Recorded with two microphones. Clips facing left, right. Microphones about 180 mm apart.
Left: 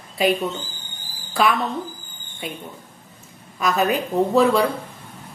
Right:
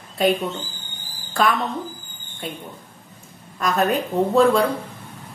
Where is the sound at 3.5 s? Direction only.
Centre (ahead or behind).